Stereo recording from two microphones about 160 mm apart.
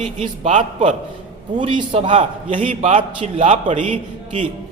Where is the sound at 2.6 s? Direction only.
50° right (ahead or behind).